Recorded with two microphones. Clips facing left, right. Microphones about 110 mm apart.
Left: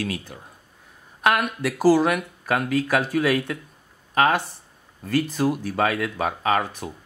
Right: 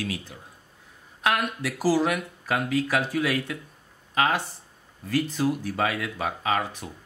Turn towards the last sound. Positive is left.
turn(degrees=55)  # may be behind; listen again after turning